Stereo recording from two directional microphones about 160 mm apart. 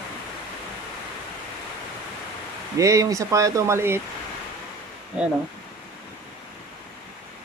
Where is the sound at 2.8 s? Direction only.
20° right (ahead or behind).